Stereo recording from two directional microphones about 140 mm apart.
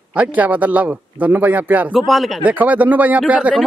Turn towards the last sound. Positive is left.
turn(degrees=-10)  # may be behind; listen again after turning